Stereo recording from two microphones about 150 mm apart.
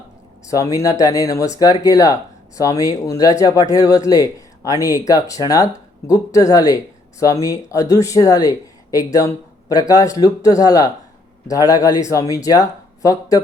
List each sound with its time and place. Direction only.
0.5 s speech: 20° left (ahead or behind)